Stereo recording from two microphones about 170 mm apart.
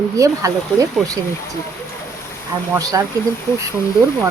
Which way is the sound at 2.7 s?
20° right (ahead or behind).